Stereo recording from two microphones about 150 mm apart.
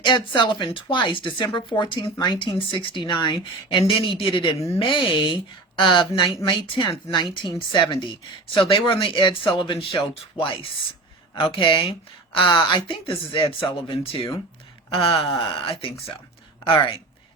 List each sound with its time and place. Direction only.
0.0 s speech: 30° left (ahead or behind)